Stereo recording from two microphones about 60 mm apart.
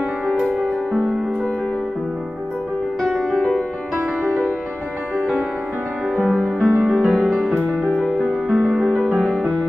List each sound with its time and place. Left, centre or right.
3.0 s music: centre
6.1 s music: right
6.6 s music: centre
8.8 s music: centre